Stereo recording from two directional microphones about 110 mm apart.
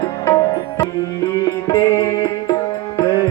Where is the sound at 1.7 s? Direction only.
25° left (ahead or behind).